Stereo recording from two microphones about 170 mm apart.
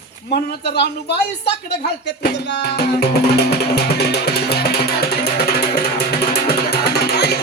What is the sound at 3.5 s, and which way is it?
Music, 70° left (ahead or behind).